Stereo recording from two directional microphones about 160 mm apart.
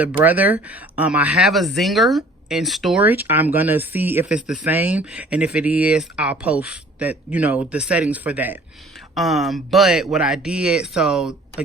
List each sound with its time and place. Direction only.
0.0 s speech: 10° right (ahead or behind)